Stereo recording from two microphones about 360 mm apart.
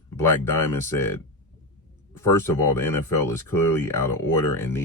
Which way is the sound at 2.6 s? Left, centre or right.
Centre.